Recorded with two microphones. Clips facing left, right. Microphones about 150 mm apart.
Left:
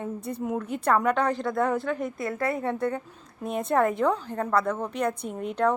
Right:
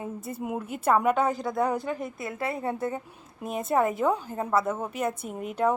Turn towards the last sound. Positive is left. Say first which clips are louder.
# left 1 dB
turn(degrees=-5)  # may be behind; listen again after turning